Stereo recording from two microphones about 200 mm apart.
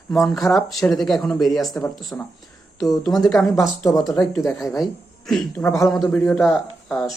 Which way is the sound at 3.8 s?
15° left (ahead or behind).